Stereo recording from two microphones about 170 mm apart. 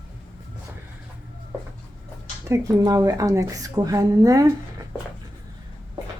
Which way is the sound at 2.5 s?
20° right (ahead or behind).